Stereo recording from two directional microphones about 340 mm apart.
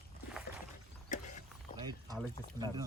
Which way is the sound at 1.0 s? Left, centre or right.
Left.